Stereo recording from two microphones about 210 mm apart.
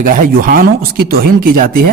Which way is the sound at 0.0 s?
40° right (ahead or behind).